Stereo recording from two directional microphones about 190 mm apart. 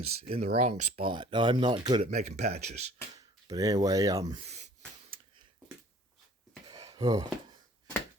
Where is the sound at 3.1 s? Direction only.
20° right (ahead or behind).